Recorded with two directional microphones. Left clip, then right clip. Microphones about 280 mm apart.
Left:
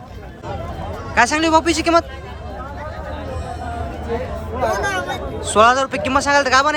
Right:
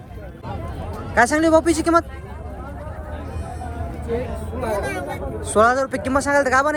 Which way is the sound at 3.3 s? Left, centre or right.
Left.